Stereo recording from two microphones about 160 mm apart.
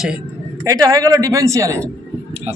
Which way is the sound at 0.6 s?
20° right (ahead or behind).